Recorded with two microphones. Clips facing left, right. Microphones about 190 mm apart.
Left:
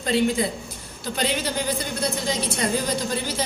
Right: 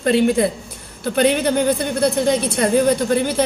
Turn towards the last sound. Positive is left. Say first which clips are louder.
# right 9 dB
turn(degrees=-60)  # may be behind; listen again after turning